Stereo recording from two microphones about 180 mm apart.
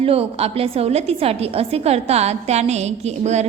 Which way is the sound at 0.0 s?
35° right (ahead or behind).